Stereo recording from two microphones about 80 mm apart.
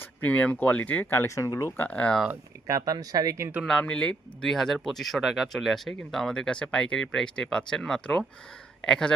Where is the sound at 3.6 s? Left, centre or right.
Centre.